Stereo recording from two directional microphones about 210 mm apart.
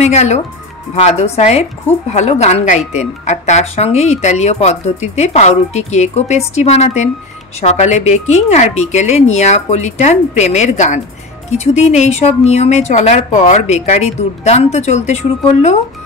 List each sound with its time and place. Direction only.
0.0 s a woman's voice: 30° left (ahead or behind)